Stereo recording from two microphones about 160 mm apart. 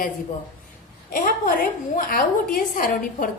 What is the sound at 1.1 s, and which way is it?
Speech, 60° left (ahead or behind).